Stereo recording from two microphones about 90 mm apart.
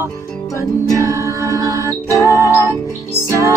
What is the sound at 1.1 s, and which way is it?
Music, 35° right (ahead or behind).